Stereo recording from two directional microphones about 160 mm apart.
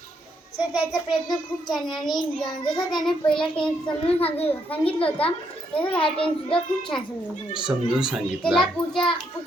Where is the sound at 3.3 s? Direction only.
5° left (ahead or behind).